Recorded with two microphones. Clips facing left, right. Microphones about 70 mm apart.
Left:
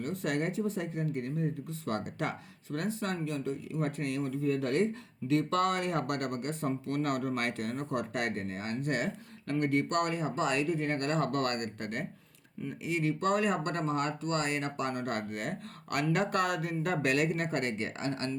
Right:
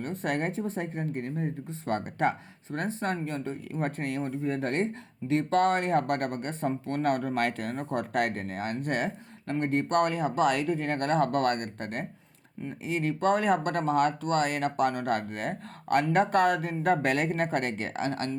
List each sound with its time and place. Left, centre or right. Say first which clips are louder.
0.0 s speech: right 2 dB; right